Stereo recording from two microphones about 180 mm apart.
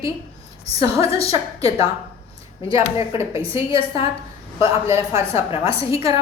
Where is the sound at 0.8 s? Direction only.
30° left (ahead or behind).